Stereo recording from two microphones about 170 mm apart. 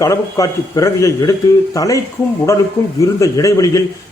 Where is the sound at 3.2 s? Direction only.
20° left (ahead or behind).